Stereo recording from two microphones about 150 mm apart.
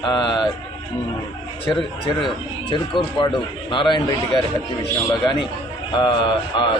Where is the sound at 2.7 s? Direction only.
35° left (ahead or behind).